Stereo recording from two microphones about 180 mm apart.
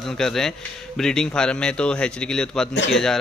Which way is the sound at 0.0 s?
Centre (ahead or behind).